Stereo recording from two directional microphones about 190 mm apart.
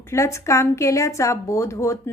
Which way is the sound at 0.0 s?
15° left (ahead or behind).